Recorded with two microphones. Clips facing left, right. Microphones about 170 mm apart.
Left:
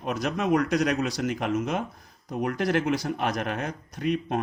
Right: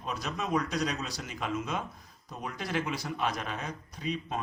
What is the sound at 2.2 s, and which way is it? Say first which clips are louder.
Speech: left 11 dB; 55° left (ahead or behind).